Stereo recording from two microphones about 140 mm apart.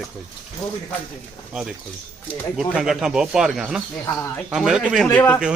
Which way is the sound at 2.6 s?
5° right (ahead or behind).